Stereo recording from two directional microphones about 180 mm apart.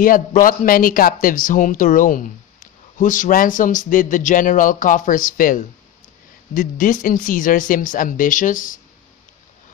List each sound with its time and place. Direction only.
0.0 s speech: 50° left (ahead or behind)